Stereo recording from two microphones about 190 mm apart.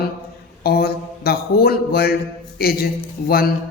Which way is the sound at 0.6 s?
55° left (ahead or behind).